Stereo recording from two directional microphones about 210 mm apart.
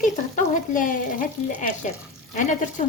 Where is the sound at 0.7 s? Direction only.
40° left (ahead or behind).